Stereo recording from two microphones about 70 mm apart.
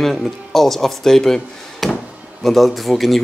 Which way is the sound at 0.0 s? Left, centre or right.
Centre.